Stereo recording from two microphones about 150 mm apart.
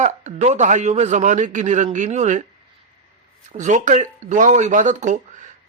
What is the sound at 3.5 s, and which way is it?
A man's voice, 55° right (ahead or behind).